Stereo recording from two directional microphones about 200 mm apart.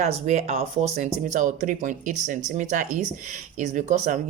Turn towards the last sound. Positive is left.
turn(degrees=-40)  # may be behind; listen again after turning